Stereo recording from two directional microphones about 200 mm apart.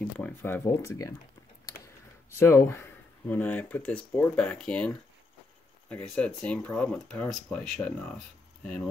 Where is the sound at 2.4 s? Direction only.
10° left (ahead or behind).